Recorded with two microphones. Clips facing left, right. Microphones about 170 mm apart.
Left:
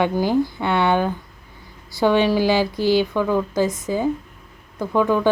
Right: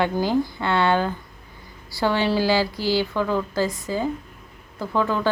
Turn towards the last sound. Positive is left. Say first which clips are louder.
# left 4 dB
turn(degrees=15)  # may be behind; listen again after turning